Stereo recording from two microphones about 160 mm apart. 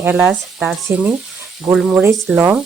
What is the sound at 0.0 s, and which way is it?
Speech, 10° right (ahead or behind).